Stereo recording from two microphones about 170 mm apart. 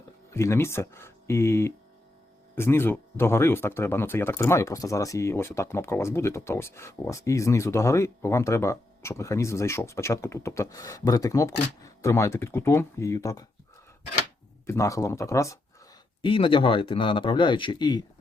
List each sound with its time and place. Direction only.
0.3 s speech: 15° left (ahead or behind)
14.7 s speech: 20° left (ahead or behind)
16.2 s speech: 30° left (ahead or behind)